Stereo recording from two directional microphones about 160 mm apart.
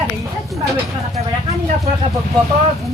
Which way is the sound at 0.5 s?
Centre (ahead or behind).